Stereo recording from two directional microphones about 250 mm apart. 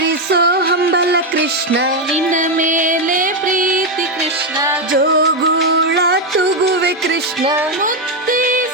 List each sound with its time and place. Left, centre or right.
0.3 s music: right
2.1 s music: right
4.9 s music: right